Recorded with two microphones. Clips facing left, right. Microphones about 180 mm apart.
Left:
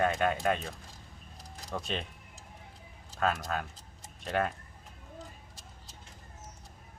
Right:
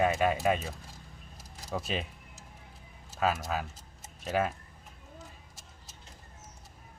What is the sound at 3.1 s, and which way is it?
Speech, 5° right (ahead or behind).